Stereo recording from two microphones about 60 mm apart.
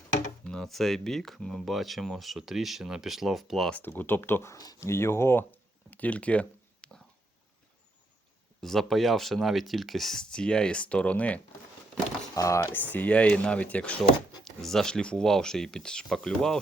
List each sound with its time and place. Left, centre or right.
0.4 s speech: centre
3.8 s speech: left
4.5 s speech: left
4.8 s speech: left
8.6 s speech: centre; by 11.3 s left
12.3 s speech: left
12.7 s speech: left
14.4 s speech: centre